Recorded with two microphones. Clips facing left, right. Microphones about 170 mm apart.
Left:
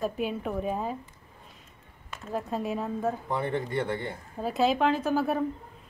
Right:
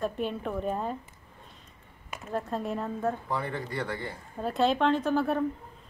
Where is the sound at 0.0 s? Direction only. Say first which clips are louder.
Left 1 dB; 5° left (ahead or behind).